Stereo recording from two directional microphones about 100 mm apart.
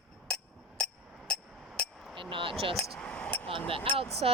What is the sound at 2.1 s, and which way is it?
Speech, 55° right (ahead or behind).